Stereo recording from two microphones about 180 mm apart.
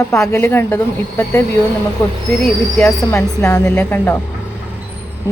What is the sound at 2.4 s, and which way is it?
A woman's voice, 5° left (ahead or behind).